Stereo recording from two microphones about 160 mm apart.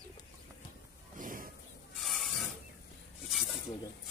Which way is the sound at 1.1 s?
55° right (ahead or behind).